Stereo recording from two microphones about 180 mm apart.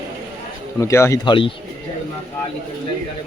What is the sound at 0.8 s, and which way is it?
Speech, 15° left (ahead or behind).